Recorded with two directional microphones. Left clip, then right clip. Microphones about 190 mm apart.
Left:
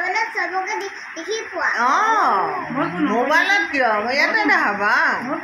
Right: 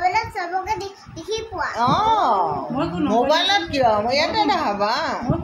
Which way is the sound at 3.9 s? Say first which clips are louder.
Left 1 dB; 30° right (ahead or behind).